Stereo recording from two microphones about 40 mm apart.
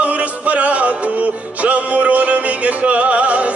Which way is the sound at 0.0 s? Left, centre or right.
Right.